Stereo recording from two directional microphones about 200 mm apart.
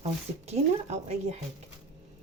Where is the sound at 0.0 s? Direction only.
30° right (ahead or behind).